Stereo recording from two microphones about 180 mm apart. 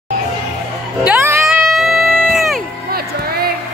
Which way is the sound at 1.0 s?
10° right (ahead or behind).